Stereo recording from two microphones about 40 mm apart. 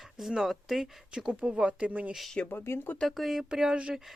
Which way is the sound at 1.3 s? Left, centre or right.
Right.